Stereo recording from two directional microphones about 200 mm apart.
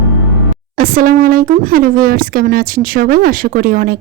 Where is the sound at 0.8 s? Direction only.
45° right (ahead or behind).